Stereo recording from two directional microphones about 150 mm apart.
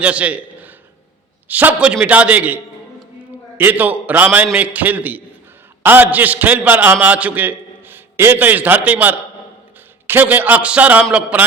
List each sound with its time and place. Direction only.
0.0 s a man's voice: 10° right (ahead or behind)
3.6 s a man's voice: 10° right (ahead or behind)